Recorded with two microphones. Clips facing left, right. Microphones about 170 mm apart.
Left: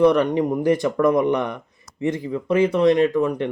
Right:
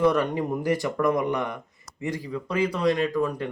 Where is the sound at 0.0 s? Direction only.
20° left (ahead or behind).